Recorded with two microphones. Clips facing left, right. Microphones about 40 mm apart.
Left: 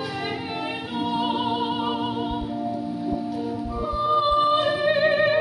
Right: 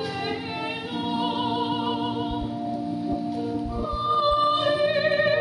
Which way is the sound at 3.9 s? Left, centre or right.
Centre.